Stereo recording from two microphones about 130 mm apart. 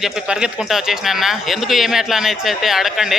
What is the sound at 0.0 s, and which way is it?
Speech, 5° right (ahead or behind).